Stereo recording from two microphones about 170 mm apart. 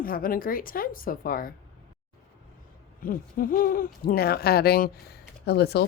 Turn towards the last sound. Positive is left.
turn(degrees=70)  # may be behind; listen again after turning